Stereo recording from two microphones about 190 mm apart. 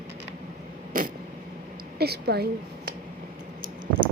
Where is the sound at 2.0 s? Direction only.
55° right (ahead or behind).